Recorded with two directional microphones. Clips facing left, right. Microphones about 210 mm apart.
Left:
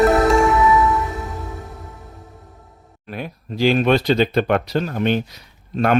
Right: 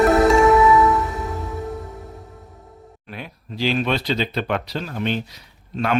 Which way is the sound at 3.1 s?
45° left (ahead or behind).